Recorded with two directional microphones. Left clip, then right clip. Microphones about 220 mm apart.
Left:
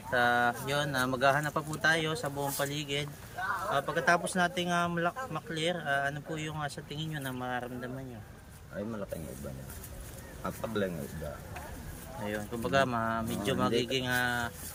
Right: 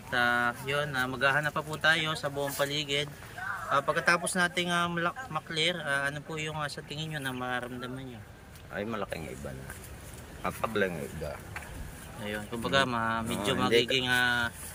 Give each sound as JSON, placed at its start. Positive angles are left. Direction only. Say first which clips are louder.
{"t": 0.1, "sound": "speech", "louder": "even", "side_deg": 20}
{"t": 10.4, "sound": "speech", "louder": "right 4 dB", "side_deg": 5}
{"t": 12.2, "sound": "speech", "louder": "right 1 dB", "side_deg": 15}